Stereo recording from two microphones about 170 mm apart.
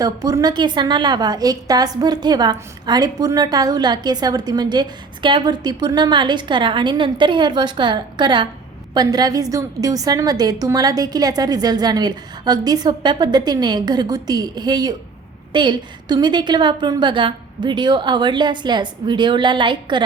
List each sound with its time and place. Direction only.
0.0 s a woman's voice: 20° right (ahead or behind)